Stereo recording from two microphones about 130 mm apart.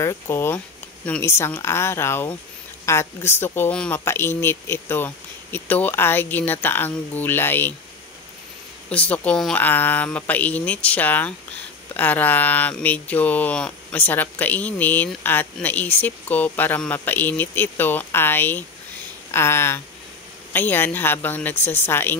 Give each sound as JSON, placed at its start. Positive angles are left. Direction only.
{"t": 0.0, "sound": "speech", "side_deg": 20}
{"t": 8.8, "sound": "speech", "side_deg": 10}